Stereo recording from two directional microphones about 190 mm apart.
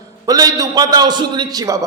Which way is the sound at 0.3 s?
20° right (ahead or behind).